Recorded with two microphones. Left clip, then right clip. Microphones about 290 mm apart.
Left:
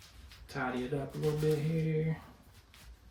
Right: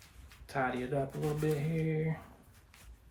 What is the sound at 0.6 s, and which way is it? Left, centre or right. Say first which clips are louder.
Speech: right 3 dB; centre.